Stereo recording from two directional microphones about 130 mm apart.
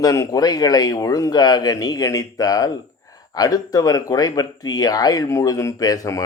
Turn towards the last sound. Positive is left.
turn(degrees=25)  # may be behind; listen again after turning